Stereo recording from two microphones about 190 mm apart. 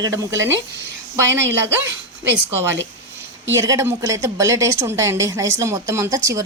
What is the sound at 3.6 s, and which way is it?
A woman's voice, 15° right (ahead or behind).